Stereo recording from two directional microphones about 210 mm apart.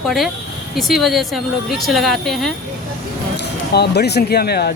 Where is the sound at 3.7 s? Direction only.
50° left (ahead or behind).